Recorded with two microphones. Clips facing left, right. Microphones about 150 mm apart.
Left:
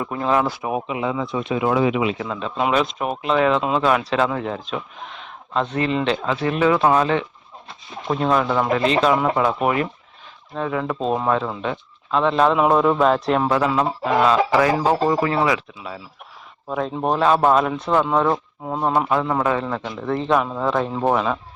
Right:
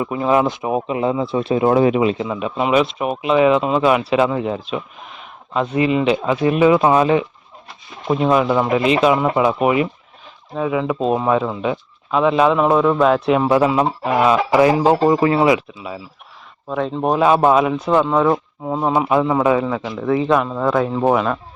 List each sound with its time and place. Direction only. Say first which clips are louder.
0.0 s speech: right 4 dB; 10° right (ahead or behind); by 2.1 s 40° right (ahead or behind)
2.2 s speech: right 2 dB; 10° right (ahead or behind)
13.5 s speech: right 4 dB; 15° right (ahead or behind)
16.6 s speech: right 3 dB; centre (ahead or behind)